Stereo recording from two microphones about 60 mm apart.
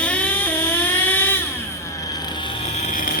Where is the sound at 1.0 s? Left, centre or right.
Left.